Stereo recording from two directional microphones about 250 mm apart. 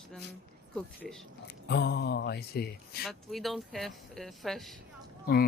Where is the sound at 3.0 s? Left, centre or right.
Centre.